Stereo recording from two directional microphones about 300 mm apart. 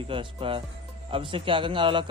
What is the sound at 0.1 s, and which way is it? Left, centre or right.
A man's voice, centre.